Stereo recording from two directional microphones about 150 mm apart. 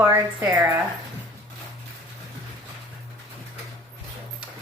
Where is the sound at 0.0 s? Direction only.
15° right (ahead or behind).